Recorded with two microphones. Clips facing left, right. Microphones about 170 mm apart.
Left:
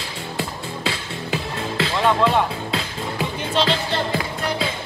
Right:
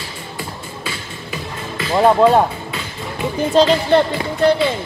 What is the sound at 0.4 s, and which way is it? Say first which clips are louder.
Music: left 3 dB; 80° left.